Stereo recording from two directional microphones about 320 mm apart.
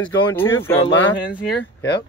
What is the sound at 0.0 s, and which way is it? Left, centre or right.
Speech, centre.